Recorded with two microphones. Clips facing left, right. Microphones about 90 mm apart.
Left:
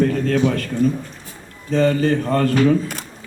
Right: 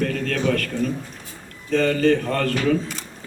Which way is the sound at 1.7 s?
30° left (ahead or behind).